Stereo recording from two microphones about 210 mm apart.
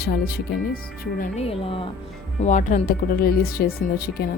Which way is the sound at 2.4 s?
35° left (ahead or behind).